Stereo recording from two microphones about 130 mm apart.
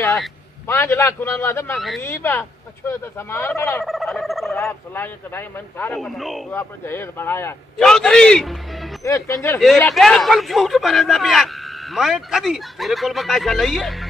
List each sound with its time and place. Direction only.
0.7 s a man's voice: 20° left (ahead or behind)
3.8 s a sound: centre (ahead or behind)
4.9 s a man's voice: 15° left (ahead or behind)
5.9 s speech: centre (ahead or behind)
6.5 s a man's voice: 15° left (ahead or behind)
7.7 s speech: 5° left (ahead or behind)
9.0 s speech: 25° left (ahead or behind)
9.8 s speech: centre (ahead or behind)